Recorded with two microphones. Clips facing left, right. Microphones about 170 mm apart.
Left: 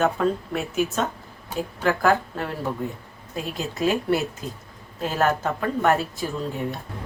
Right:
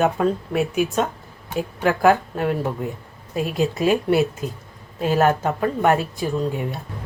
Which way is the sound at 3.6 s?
Centre (ahead or behind).